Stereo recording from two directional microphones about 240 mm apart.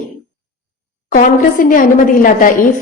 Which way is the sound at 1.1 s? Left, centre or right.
Left.